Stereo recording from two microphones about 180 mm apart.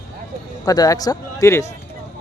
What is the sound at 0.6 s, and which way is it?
Speech, 20° left (ahead or behind).